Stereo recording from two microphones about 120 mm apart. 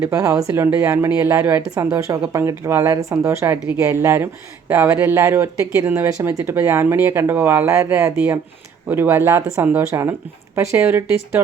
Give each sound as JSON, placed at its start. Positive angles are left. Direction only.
{"t": 0.0, "sound": "speech", "side_deg": -25}